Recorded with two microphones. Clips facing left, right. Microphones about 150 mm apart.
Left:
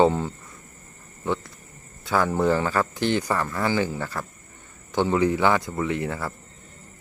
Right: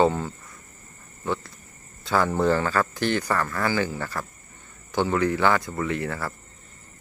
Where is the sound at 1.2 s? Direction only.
20° left (ahead or behind).